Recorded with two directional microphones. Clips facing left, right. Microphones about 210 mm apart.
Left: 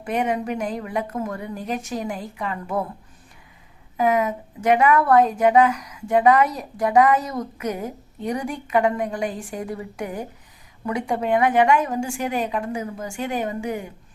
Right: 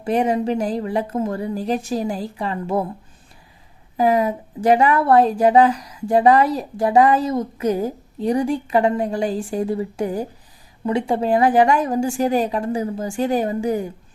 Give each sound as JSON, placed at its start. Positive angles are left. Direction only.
{"t": 0.0, "sound": "a woman's voice", "side_deg": -35}
{"t": 3.9, "sound": "a woman's voice", "side_deg": -35}